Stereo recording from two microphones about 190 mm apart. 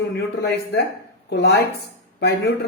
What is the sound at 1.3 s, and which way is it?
Speech, 60° left (ahead or behind).